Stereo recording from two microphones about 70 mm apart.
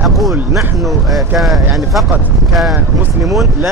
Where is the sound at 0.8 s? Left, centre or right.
Centre.